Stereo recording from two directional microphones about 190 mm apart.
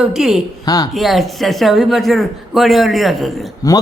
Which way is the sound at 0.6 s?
20° left (ahead or behind).